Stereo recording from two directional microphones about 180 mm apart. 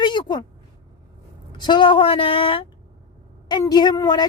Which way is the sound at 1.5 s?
25° left (ahead or behind).